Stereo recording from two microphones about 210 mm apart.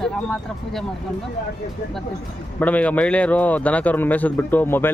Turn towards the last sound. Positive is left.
turn(degrees=10)  # may be behind; listen again after turning